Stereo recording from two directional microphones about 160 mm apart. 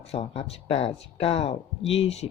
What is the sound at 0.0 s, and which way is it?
Speech, 40° left (ahead or behind).